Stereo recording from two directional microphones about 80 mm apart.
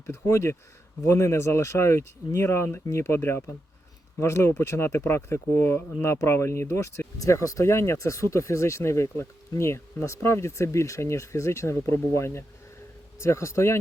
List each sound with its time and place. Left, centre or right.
0.0 s speech: left